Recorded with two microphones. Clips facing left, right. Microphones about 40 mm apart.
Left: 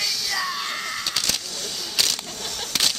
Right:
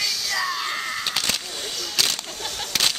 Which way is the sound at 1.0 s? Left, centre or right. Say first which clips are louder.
Right 1 dB; centre.